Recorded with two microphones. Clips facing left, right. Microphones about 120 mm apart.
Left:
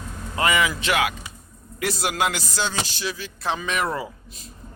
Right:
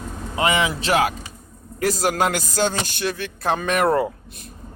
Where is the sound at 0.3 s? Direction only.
25° right (ahead or behind).